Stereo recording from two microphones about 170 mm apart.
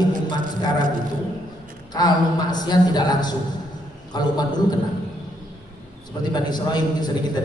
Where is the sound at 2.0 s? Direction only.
25° left (ahead or behind).